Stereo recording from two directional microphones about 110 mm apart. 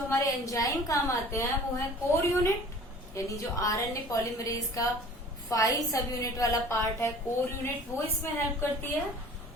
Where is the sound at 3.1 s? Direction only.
30° left (ahead or behind).